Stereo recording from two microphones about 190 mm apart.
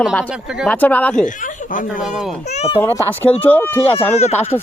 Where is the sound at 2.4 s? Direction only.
35° left (ahead or behind).